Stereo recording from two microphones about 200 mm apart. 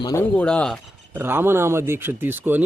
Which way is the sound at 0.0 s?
15° left (ahead or behind).